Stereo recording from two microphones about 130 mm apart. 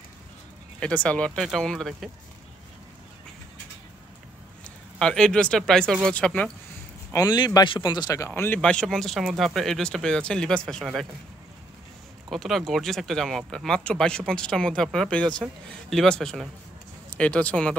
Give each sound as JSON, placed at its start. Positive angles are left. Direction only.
{"t": 0.7, "sound": "speech", "side_deg": 10}
{"t": 4.6, "sound": "speech", "side_deg": 5}
{"t": 7.1, "sound": "speech", "side_deg": 30}
{"t": 8.3, "sound": "speech", "side_deg": 10}
{"t": 12.3, "sound": "speech", "side_deg": 0}